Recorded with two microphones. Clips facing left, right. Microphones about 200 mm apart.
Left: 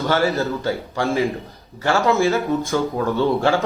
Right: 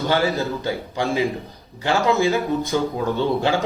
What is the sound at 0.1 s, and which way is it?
Speech, 15° right (ahead or behind).